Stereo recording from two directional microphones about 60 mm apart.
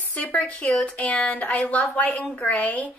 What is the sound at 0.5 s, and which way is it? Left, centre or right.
A woman's voice, left.